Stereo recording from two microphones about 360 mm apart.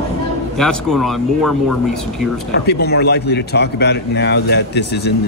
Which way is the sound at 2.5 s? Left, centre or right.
Left.